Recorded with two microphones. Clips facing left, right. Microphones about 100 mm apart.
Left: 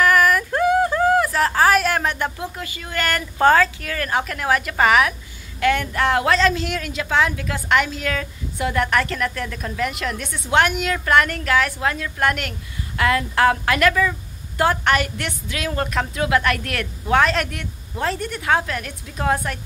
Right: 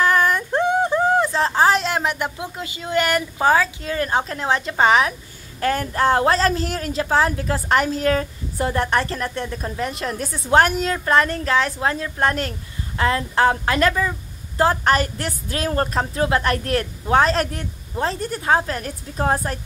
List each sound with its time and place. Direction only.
0.0 s a sound: 25° right (ahead or behind)
3.3 s speech: 10° right (ahead or behind)
3.8 s a woman's voice: 25° right (ahead or behind)